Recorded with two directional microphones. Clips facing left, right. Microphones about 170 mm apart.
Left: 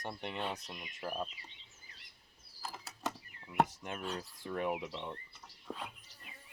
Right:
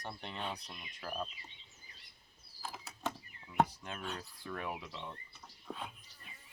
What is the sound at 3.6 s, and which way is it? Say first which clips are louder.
Speech: left 2 dB; 20° left (ahead or behind).